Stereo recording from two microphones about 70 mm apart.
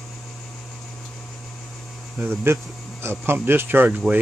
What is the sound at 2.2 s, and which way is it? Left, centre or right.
Speech, right.